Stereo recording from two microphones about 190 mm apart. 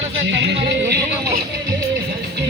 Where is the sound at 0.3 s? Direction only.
65° right (ahead or behind).